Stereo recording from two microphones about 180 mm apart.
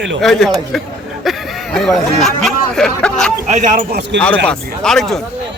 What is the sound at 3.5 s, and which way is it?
Speech, 45° right (ahead or behind).